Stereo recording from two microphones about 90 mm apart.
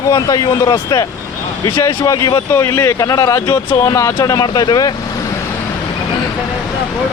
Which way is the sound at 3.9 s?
40° left (ahead or behind).